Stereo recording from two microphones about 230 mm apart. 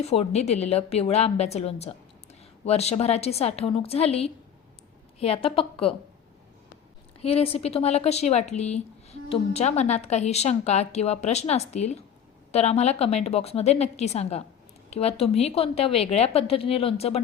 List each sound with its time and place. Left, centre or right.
0.0 s speech: left
7.2 s speech: left